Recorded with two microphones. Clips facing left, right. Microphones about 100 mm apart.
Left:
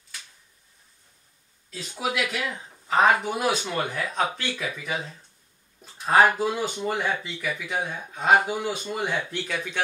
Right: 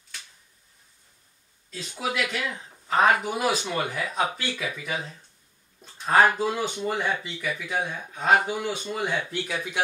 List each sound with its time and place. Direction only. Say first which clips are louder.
1.7 s speech: left 1 dB; 5° left (ahead or behind)
5.8 s a man's voice: left 1 dB; 5° left (ahead or behind)